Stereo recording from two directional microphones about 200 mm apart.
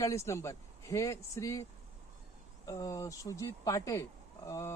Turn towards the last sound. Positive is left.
turn(degrees=15)  # may be behind; listen again after turning